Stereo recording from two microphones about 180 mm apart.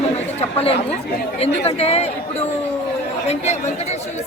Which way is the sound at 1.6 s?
35° left (ahead or behind).